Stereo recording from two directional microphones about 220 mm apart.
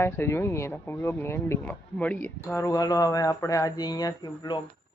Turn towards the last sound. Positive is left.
turn(degrees=20)  # may be behind; listen again after turning